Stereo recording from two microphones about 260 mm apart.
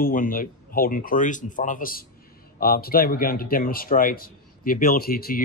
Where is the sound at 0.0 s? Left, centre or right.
Left.